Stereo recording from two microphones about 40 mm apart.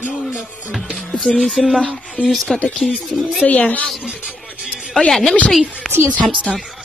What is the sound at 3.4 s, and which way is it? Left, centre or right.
Speech, left.